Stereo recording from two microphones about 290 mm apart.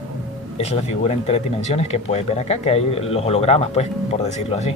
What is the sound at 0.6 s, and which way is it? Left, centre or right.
Speech, left.